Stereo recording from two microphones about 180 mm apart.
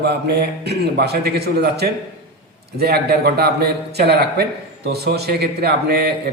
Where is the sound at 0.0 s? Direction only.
65° right (ahead or behind).